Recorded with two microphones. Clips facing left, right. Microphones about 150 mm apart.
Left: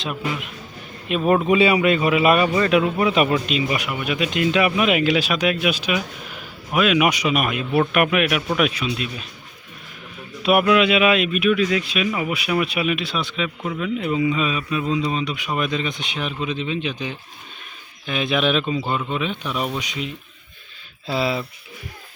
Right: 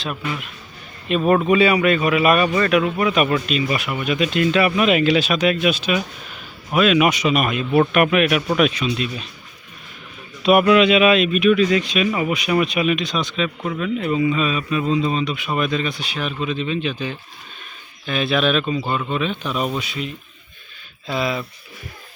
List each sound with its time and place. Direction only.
1.0 s speech: 10° left (ahead or behind)
1.5 s a man's voice: 20° left (ahead or behind); by 9.2 s 5° left (ahead or behind)
10.4 s speech: 5° left (ahead or behind)
21.1 s a man's voice: 30° left (ahead or behind)